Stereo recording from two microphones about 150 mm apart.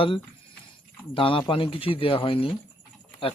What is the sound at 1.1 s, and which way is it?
Speech, 35° left (ahead or behind).